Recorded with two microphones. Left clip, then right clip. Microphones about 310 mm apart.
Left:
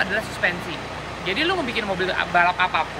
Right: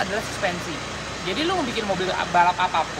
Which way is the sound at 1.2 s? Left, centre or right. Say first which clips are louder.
Left 2 dB; centre.